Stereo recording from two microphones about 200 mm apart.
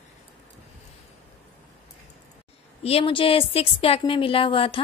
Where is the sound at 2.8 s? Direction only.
25° left (ahead or behind).